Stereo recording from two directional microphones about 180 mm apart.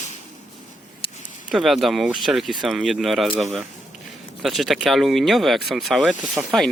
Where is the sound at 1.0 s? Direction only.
30° left (ahead or behind).